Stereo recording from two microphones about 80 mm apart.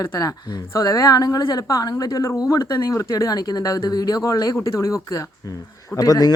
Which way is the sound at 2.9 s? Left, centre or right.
Left.